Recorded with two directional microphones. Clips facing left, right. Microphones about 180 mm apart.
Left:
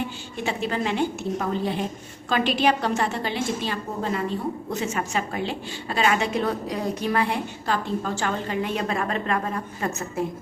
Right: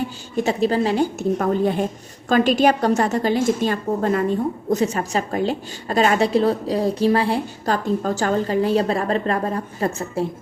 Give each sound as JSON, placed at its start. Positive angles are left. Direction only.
{"t": 0.3, "sound": "a woman's voice", "side_deg": -40}
{"t": 1.4, "sound": "a woman's voice", "side_deg": -50}